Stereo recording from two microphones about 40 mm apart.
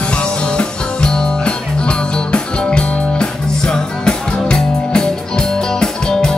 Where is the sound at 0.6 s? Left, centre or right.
Left.